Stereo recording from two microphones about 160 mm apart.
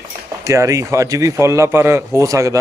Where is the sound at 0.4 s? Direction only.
20° right (ahead or behind).